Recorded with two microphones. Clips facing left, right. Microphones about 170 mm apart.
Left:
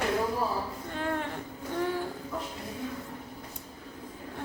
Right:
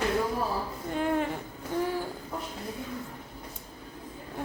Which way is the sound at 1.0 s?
15° right (ahead or behind).